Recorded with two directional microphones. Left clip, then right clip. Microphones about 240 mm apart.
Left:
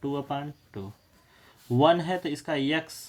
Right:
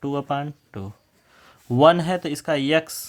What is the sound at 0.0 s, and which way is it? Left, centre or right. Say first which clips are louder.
Speech: right 6 dB; right.